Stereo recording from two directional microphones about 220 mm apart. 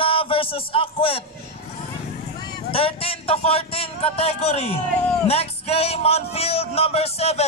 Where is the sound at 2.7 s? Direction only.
25° left (ahead or behind).